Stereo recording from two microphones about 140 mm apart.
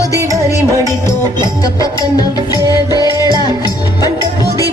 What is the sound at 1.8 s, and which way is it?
Music, 25° left (ahead or behind).